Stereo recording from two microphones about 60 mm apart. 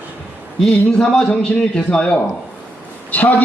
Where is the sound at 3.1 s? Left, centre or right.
Left.